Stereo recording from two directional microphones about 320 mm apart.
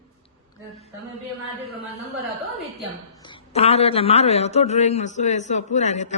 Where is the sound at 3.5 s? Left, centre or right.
Centre.